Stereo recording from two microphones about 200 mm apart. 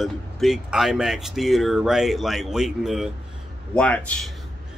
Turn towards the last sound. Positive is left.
turn(degrees=5)  # may be behind; listen again after turning